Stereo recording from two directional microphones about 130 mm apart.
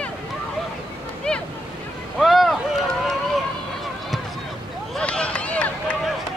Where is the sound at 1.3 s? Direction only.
10° left (ahead or behind).